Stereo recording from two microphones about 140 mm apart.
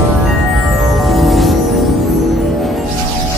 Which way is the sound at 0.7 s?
Centre (ahead or behind).